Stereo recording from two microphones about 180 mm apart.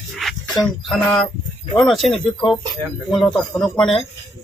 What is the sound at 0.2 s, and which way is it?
Speech, centre (ahead or behind).